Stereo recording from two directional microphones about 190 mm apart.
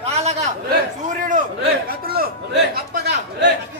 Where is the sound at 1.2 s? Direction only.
50° right (ahead or behind).